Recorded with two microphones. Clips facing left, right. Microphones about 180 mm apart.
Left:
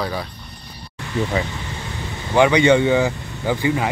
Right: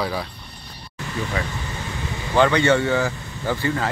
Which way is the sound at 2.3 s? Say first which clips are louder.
Left 3 dB; 15° left (ahead or behind).